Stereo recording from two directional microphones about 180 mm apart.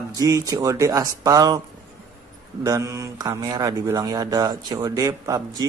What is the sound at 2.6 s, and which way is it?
Speech, 20° right (ahead or behind).